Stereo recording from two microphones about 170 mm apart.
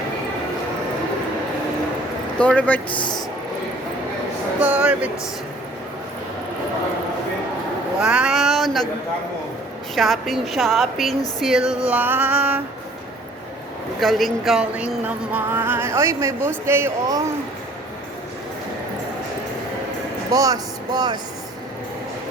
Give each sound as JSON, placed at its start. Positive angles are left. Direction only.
{"t": 2.4, "sound": "speech", "side_deg": 10}
{"t": 2.9, "sound": "speech", "side_deg": 25}
{"t": 4.6, "sound": "speech", "side_deg": -5}
{"t": 8.0, "sound": "speech", "side_deg": -5}
{"t": 9.9, "sound": "a woman's voice", "side_deg": 0}
{"t": 14.0, "sound": "speech", "side_deg": 0}
{"t": 20.3, "sound": "speech", "side_deg": -20}